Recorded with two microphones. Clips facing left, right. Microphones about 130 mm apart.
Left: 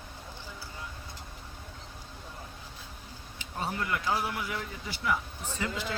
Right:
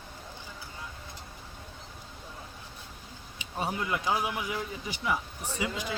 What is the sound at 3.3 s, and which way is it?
Speech, 15° right (ahead or behind).